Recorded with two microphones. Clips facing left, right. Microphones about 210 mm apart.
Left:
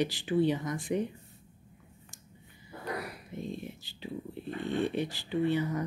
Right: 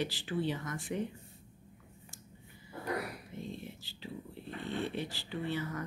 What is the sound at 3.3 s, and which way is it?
Speech, 15° left (ahead or behind).